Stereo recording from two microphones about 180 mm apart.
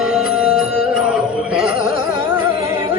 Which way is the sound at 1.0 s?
5° right (ahead or behind).